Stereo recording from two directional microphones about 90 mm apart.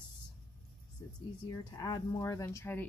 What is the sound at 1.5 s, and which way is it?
Speech, 45° left (ahead or behind).